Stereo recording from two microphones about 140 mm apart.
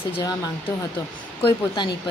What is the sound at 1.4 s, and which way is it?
Speech, 35° left (ahead or behind).